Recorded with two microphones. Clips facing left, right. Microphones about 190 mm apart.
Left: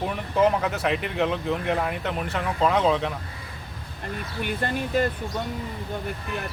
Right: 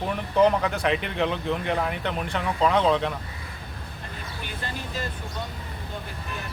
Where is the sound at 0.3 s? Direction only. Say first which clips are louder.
Right 1 dB; 5° left (ahead or behind).